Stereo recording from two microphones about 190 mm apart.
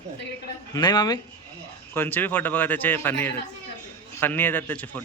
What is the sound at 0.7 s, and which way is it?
Speech, 20° left (ahead or behind).